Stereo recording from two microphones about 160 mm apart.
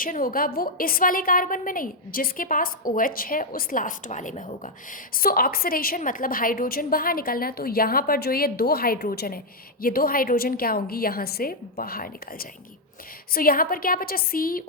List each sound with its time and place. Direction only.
0.0 s a woman's voice: 60° left (ahead or behind)